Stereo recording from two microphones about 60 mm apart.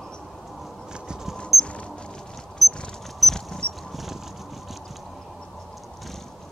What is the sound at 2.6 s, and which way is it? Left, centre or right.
Cricket, centre.